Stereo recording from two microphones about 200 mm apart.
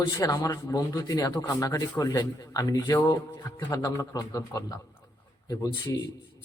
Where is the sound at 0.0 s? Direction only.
15° left (ahead or behind).